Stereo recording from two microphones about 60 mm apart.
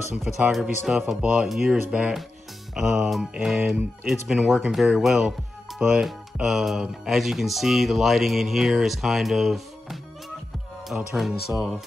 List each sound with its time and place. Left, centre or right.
0.5 s speech: centre
1.2 s speech: centre
11.1 s speech: centre